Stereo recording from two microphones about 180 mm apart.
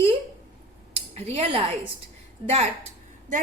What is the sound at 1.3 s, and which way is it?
Speech, 35° right (ahead or behind).